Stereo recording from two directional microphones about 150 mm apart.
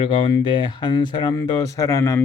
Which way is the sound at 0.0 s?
35° left (ahead or behind).